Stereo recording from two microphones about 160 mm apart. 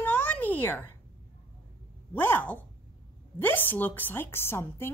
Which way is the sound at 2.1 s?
10° left (ahead or behind).